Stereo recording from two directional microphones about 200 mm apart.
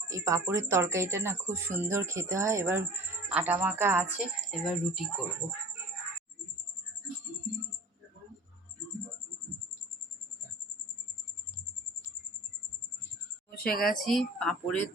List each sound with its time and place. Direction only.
0.1 s speech: 15° right (ahead or behind)
4.5 s speech: centre (ahead or behind)
13.5 s a woman's voice: 45° left (ahead or behind)
14.0 s speech: centre (ahead or behind)